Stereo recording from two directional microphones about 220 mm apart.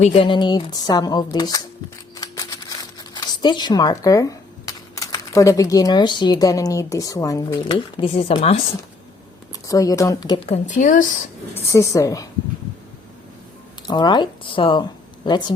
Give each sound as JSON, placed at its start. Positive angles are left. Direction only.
{"t": 0.0, "sound": "speech", "side_deg": 25}
{"t": 9.5, "sound": "speech", "side_deg": 15}
{"t": 11.5, "sound": "speech", "side_deg": 15}
{"t": 13.8, "sound": "speech", "side_deg": 20}